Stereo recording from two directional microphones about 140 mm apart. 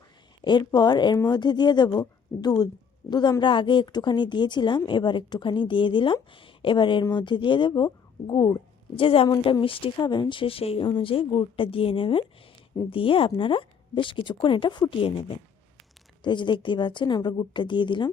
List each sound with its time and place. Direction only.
0.4 s a woman's voice: 30° left (ahead or behind)
16.2 s a woman's voice: 35° left (ahead or behind)